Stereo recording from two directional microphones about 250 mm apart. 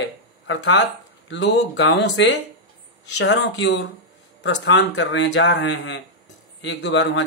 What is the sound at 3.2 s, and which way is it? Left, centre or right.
A man's voice, left.